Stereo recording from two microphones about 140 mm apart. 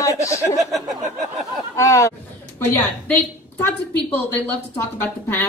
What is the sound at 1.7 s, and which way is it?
A woman's voice, 20° left (ahead or behind).